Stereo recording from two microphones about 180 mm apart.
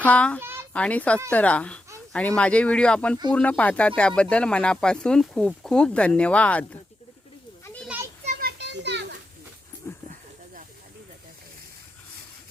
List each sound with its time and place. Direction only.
0.0 s speech: 5° left (ahead or behind)
0.3 s a sound: 10° right (ahead or behind)
0.7 s speech: 10° left (ahead or behind)
8.2 s children playing: 50° right (ahead or behind); by 9.0 s 75° right (ahead or behind)